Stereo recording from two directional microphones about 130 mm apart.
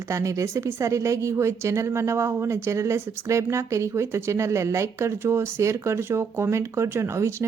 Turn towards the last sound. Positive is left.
turn(degrees=-20)  # may be behind; listen again after turning